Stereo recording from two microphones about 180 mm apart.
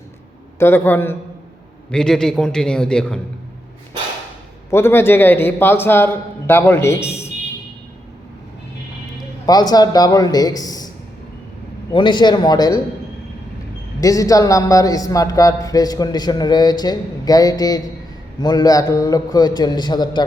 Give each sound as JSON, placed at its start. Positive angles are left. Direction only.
{"t": 0.6, "sound": "a man's voice", "side_deg": 10}
{"t": 4.7, "sound": "a man's voice", "side_deg": 15}
{"t": 9.5, "sound": "speech", "side_deg": 20}
{"t": 11.9, "sound": "speech", "side_deg": 25}
{"t": 14.0, "sound": "speech", "side_deg": 20}